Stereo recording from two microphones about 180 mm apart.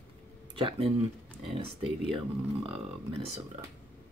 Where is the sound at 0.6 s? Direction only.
30° right (ahead or behind).